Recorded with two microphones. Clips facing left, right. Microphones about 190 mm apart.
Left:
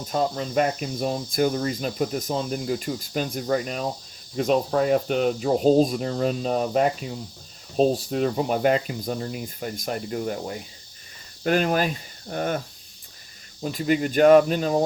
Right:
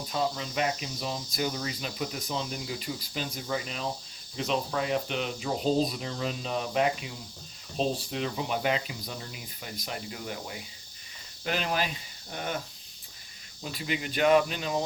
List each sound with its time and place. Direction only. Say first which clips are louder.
0.1 s cricket: left 7 dB; 45° left (ahead or behind)